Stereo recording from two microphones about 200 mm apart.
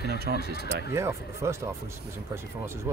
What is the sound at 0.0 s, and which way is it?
Vehicle, 55° right (ahead or behind).